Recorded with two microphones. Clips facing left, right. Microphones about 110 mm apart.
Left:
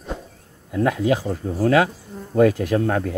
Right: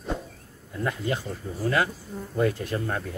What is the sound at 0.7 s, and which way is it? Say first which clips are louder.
Speech: left 9 dB; 75° left (ahead or behind).